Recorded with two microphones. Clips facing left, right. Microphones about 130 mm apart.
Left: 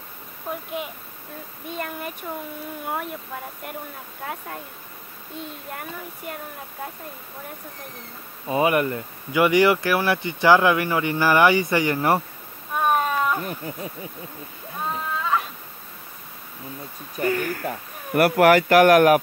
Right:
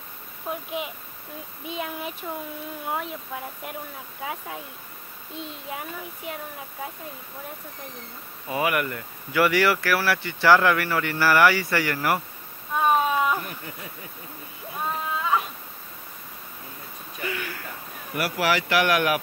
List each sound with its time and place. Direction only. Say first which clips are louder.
0.5 s a child's voice: even; 5° right (ahead or behind)
1.8 s speech: left 1 dB; centre (ahead or behind)
5.7 s speech: even; 5° right (ahead or behind)
8.5 s speech: left 5 dB; 25° left (ahead or behind)
12.7 s a sound: even; centre (ahead or behind)
13.5 s speech: left 7 dB; 35° left (ahead or behind)
17.2 s speech: left 9 dB; 45° left (ahead or behind)